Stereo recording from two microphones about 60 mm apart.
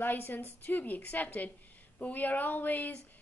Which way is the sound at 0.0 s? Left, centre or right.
Left.